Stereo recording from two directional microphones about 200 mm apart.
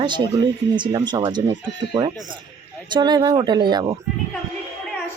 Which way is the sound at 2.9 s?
20° right (ahead or behind).